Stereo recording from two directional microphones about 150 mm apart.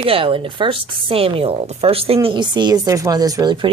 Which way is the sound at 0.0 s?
35° right (ahead or behind).